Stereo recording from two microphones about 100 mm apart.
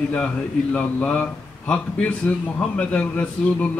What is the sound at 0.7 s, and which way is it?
A man's voice, 15° left (ahead or behind).